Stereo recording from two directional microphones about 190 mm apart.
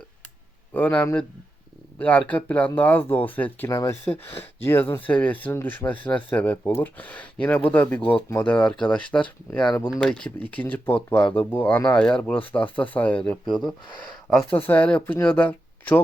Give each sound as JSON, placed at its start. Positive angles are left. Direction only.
{"t": 0.7, "sound": "speech", "side_deg": 10}
{"t": 9.6, "sound": "speech", "side_deg": 20}
{"t": 9.9, "sound": "speech", "side_deg": 5}